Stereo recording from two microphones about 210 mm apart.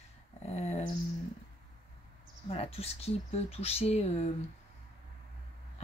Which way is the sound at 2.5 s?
30° left (ahead or behind).